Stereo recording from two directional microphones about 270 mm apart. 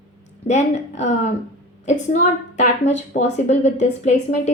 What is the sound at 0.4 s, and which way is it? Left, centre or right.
A woman's voice, left.